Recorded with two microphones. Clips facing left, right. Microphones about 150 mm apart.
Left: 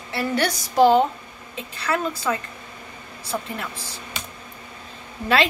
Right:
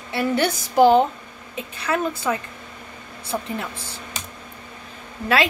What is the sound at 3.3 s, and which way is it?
Speech, 20° right (ahead or behind).